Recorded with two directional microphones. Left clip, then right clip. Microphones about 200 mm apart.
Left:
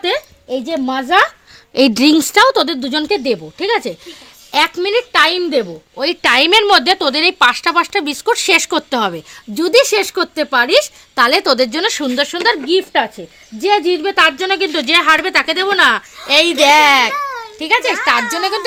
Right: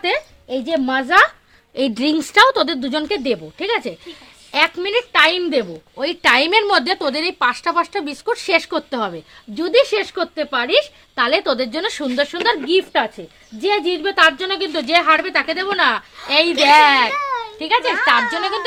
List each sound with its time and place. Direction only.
0.0 s speech: 35° left (ahead or behind)
1.7 s a woman's voice: 50° left (ahead or behind)
17.8 s speech: 10° left (ahead or behind)